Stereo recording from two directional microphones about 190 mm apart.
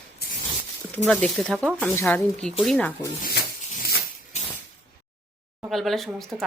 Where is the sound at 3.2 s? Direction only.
50° left (ahead or behind).